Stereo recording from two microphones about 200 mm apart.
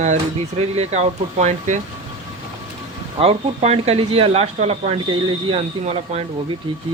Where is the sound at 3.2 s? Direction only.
30° right (ahead or behind).